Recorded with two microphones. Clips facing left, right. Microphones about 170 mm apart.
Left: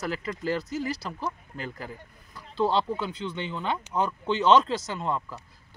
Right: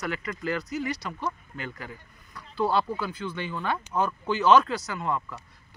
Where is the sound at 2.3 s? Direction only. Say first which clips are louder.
Even; 25° left (ahead or behind).